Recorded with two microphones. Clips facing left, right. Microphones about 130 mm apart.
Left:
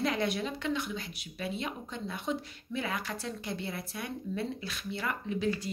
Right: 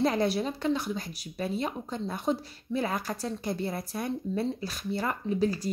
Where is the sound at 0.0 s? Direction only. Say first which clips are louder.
Right 5 dB; 35° right (ahead or behind).